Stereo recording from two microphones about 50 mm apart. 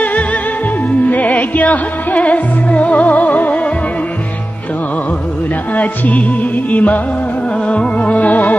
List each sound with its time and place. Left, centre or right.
0.0 s music: left
5.8 s music: left